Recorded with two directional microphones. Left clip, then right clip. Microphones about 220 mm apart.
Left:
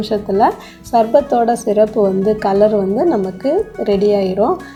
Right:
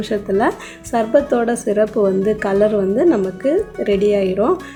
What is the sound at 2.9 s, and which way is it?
Speech, 15° right (ahead or behind).